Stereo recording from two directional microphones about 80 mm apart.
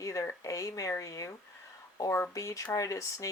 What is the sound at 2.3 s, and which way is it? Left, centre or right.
Speech, left.